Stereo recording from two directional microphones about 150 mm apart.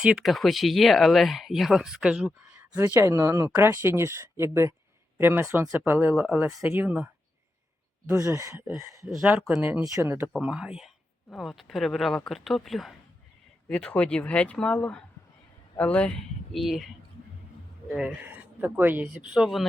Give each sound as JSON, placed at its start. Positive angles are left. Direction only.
{"t": 0.0, "sound": "speech", "side_deg": -5}
{"t": 10.3, "sound": "speech", "side_deg": -5}